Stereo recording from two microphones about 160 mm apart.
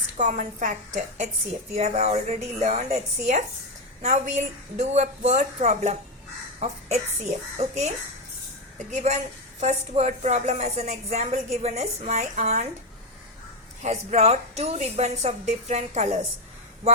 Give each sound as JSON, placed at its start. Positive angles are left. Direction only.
{"t": 0.2, "sound": "a woman's voice", "side_deg": -50}
{"t": 9.6, "sound": "a woman's voice", "side_deg": -45}
{"t": 13.8, "sound": "a woman's voice", "side_deg": -45}